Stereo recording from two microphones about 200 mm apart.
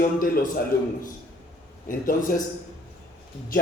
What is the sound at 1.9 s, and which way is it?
Speech, 45° left (ahead or behind).